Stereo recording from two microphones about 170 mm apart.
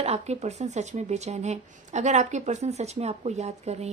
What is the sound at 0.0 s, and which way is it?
Speech, 40° right (ahead or behind).